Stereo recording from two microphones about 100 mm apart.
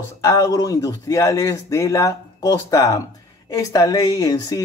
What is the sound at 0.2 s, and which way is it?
Speech, 30° left (ahead or behind).